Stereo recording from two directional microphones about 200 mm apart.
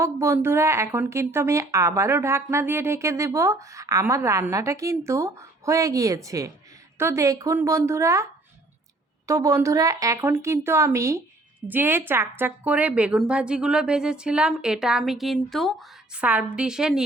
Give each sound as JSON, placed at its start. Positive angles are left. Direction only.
{"t": 0.0, "sound": "a woman's voice", "side_deg": -15}